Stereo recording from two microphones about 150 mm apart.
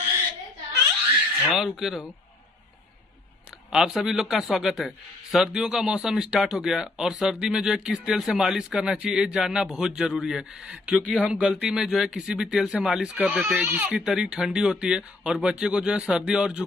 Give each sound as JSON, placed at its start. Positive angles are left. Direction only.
{"t": 1.5, "sound": "speech", "side_deg": 0}
{"t": 3.7, "sound": "speech", "side_deg": -5}